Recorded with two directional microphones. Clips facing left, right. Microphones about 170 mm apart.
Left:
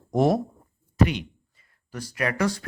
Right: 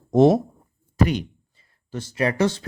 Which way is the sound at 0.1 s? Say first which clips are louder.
Right 6 dB; 25° right (ahead or behind).